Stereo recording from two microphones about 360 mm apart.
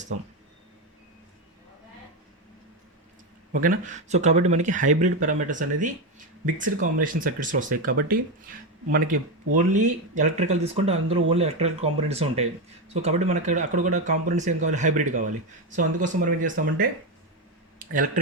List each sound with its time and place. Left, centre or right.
3.5 s speech: right